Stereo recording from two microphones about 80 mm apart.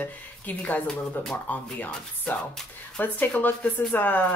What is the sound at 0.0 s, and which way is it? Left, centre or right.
Speech, left.